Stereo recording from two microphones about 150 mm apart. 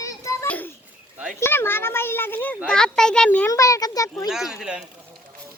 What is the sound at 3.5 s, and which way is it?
Speech, 20° left (ahead or behind).